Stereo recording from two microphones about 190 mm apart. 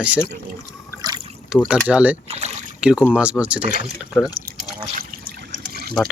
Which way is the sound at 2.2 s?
35° right (ahead or behind).